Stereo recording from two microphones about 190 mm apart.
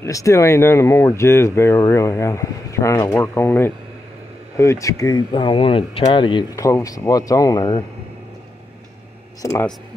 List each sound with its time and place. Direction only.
0.0 s speech: 15° left (ahead or behind)
9.4 s speech: 15° left (ahead or behind)